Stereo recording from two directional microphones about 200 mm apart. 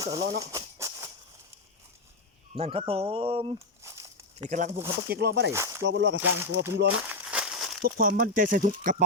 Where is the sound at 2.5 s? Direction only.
30° right (ahead or behind).